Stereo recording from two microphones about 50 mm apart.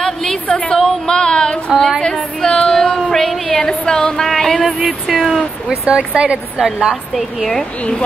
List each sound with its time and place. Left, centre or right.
0.0 s a sound: centre
4.3 s music: centre
4.8 s speech: centre
5.9 s speech: right
7.2 s speech: centre